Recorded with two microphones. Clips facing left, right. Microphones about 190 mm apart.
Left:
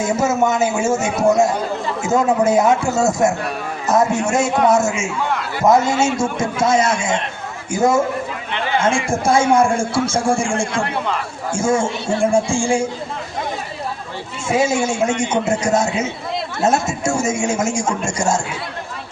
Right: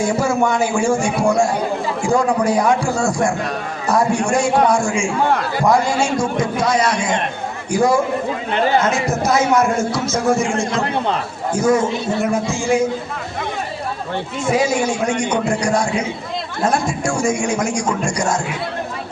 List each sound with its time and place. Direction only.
0.0 s a man's voice: 20° left (ahead or behind)
5.3 s a sound: 40° right (ahead or behind)
5.6 s a man's voice: 20° left (ahead or behind)
8.5 s a man's voice: 40° right (ahead or behind)
8.8 s a man's voice: 30° left (ahead or behind)
10.8 s a man's voice: 35° right (ahead or behind)
11.5 s a man's voice: 25° left (ahead or behind)
14.4 s a man's voice: 25° left (ahead or behind)